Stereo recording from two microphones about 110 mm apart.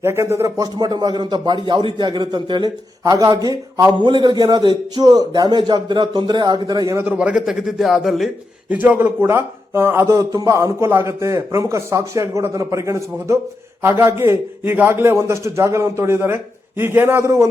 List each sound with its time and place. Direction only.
0.0 s a man's voice: 25° right (ahead or behind); by 2.6 s 45° right (ahead or behind)
3.0 s a man's voice: 30° right (ahead or behind)
4.0 s a man's voice: 45° right (ahead or behind)
6.8 s a man's voice: 20° right (ahead or behind); by 8.3 s centre (ahead or behind)
8.7 s speech: 15° right (ahead or behind)